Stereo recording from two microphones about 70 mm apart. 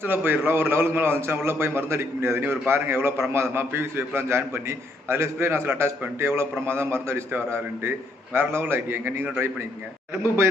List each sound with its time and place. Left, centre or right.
0.0 s a man's voice: right
10.2 s a man's voice: right